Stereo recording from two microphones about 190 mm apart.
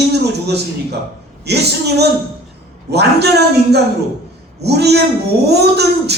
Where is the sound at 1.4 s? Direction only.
60° right (ahead or behind).